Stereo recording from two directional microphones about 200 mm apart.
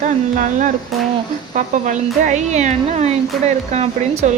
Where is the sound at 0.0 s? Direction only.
40° right (ahead or behind).